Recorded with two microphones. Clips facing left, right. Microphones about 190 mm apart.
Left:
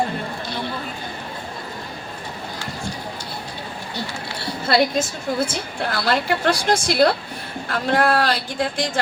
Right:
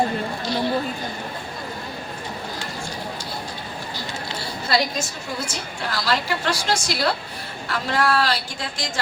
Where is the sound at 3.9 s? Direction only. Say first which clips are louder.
Left 3 dB; 60° left (ahead or behind).